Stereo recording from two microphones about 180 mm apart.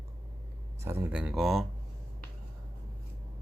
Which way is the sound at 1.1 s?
5° right (ahead or behind).